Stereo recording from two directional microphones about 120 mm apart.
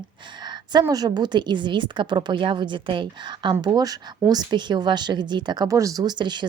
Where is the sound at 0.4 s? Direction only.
35° right (ahead or behind).